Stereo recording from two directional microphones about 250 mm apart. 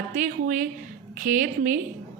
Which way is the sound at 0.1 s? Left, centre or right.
Right.